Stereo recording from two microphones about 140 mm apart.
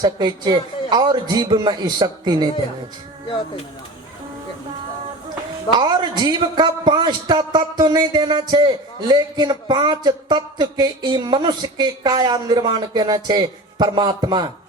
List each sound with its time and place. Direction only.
0.0 s a man's voice: 30° right (ahead or behind)
5.7 s a man's voice: 30° right (ahead or behind)